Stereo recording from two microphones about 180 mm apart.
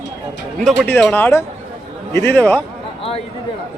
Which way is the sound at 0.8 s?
10° left (ahead or behind).